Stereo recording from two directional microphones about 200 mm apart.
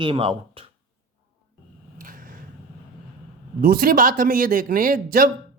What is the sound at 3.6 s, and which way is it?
Speech, 45° right (ahead or behind).